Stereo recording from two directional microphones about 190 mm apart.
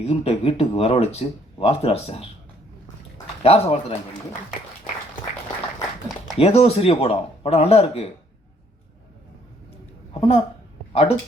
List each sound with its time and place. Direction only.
0.0 s speech: 30° left (ahead or behind)
3.4 s speech: 30° left (ahead or behind)
6.3 s speech: 30° left (ahead or behind)
10.2 s speech: 30° left (ahead or behind)